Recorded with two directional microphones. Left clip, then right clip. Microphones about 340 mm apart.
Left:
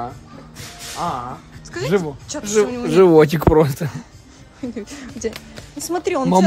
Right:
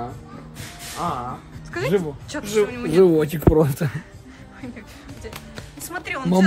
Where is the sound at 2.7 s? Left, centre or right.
Centre.